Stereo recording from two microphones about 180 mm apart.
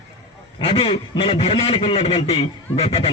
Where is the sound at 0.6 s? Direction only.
30° left (ahead or behind).